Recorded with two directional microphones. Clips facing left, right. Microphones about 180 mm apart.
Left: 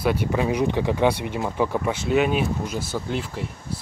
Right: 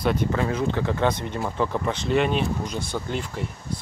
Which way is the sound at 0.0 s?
10° left (ahead or behind).